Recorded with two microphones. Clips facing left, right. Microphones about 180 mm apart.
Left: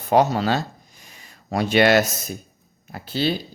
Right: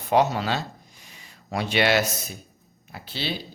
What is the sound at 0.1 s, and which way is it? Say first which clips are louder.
Speech: left 3 dB; 40° left (ahead or behind).